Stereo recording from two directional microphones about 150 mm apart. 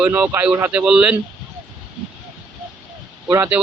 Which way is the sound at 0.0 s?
10° right (ahead or behind).